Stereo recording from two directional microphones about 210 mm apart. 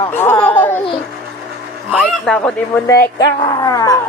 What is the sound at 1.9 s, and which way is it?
Speech, centre (ahead or behind).